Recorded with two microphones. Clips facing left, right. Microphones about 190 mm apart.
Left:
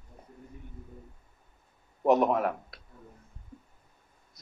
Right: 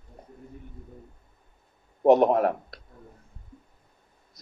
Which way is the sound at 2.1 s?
35° right (ahead or behind).